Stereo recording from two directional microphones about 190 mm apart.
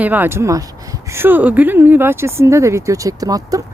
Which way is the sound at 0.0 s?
10° right (ahead or behind).